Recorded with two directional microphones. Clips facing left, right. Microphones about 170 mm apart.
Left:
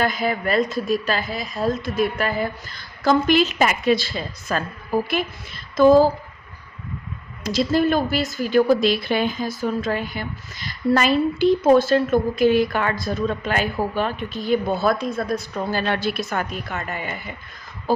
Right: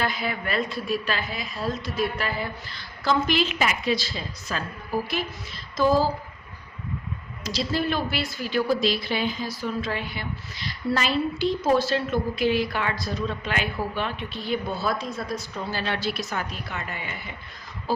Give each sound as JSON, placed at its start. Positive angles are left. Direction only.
{"t": 0.0, "sound": "a woman's voice", "side_deg": 45}
{"t": 5.7, "sound": "speech", "side_deg": 55}
{"t": 7.4, "sound": "a woman's voice", "side_deg": 50}